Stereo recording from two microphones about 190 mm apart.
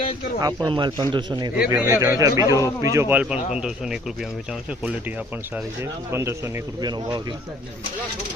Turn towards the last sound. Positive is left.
turn(degrees=-20)  # may be behind; listen again after turning